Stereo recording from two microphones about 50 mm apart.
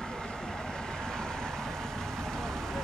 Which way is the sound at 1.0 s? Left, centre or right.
Centre.